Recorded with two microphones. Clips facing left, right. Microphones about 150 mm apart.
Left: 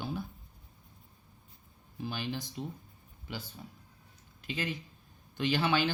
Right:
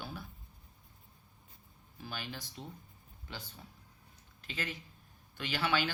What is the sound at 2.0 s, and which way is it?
Speech, 20° left (ahead or behind).